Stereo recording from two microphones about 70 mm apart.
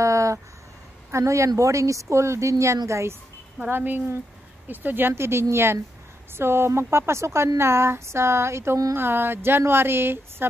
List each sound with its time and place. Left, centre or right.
0.0 s a sound: right
1.1 s a woman's voice: right
3.6 s speech: right